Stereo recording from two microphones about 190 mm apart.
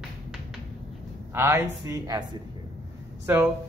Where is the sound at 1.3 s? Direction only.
10° right (ahead or behind).